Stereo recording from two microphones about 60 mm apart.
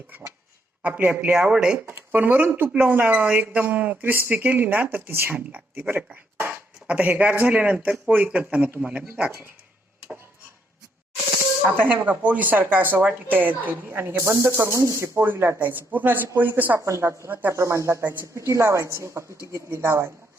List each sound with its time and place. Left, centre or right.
0.8 s speech: right
1.5 s speech: centre
1.9 s speech: right
5.5 s speech: right
6.4 s a sound: right
7.4 s speech: right
11.8 s speech: right
15.2 s speech: right
16.8 s a woman's voice: right
18.0 s speech: right
18.3 s a woman's voice: right